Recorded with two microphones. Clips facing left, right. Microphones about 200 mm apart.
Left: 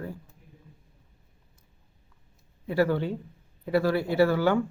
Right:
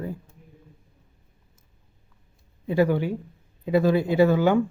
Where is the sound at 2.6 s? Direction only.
15° right (ahead or behind).